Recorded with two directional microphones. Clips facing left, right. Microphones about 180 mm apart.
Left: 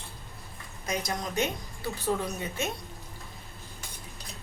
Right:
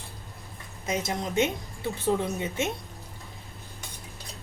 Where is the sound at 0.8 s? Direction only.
25° right (ahead or behind).